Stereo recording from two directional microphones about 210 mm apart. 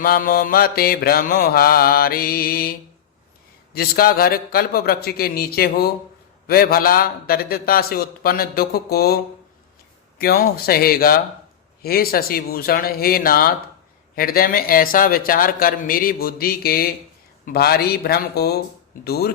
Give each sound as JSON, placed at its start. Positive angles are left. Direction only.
{"t": 0.0, "sound": "a man's voice", "side_deg": 45}